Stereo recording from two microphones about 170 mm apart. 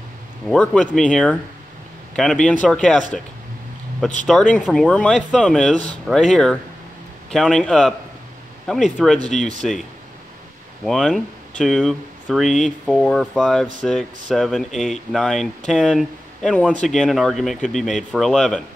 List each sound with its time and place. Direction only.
0.5 s speech: centre (ahead or behind)
4.3 s speech: centre (ahead or behind)
10.8 s speech: centre (ahead or behind)